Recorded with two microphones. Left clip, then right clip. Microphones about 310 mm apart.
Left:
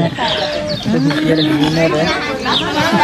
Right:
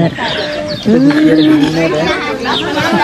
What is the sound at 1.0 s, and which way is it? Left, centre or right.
Speech, centre.